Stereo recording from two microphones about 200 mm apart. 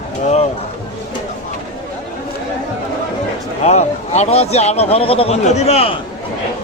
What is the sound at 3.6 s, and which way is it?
A man's voice, 35° left (ahead or behind).